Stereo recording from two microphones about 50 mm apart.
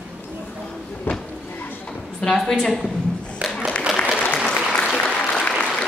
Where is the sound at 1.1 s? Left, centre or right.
Left.